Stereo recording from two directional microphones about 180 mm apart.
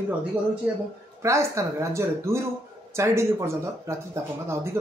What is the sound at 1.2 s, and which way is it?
Speech, 15° right (ahead or behind).